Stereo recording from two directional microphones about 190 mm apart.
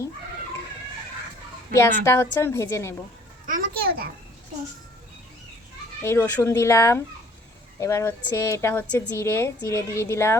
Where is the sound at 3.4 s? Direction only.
45° right (ahead or behind).